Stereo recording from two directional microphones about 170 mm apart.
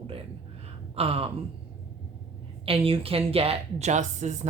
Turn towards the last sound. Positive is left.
turn(degrees=-45)  # may be behind; listen again after turning